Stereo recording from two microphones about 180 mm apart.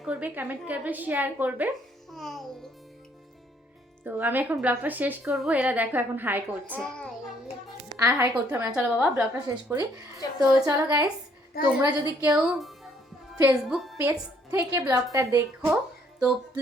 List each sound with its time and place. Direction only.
0.0 s a woman's voice: 5° right (ahead or behind)
2.1 s a child's voice: centre (ahead or behind)
4.0 s a woman's voice: 10° right (ahead or behind)
6.8 s child singing: 5° left (ahead or behind)
7.9 s a woman's voice: 15° right (ahead or behind)
10.2 s a woman's voice: 20° left (ahead or behind)
10.7 s a woman's voice: 20° right (ahead or behind)
12.2 s a woman's voice: centre (ahead or behind)
14.0 s a woman's voice: 15° right (ahead or behind)